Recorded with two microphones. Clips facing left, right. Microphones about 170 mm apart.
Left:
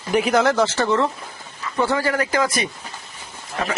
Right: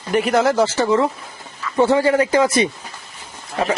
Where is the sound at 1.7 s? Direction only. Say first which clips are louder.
Right 6 dB; 20° right (ahead or behind).